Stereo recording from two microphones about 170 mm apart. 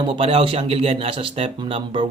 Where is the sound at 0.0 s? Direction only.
30° right (ahead or behind).